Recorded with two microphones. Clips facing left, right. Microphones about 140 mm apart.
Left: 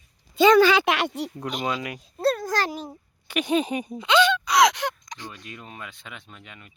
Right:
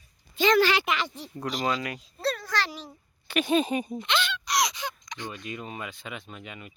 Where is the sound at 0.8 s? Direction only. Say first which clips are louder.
Left 6 dB; 70° left (ahead or behind).